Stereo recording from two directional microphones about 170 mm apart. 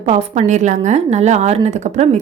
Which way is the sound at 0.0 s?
40° right (ahead or behind).